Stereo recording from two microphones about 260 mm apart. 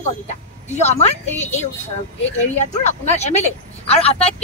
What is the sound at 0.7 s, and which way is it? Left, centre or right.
Speech, left.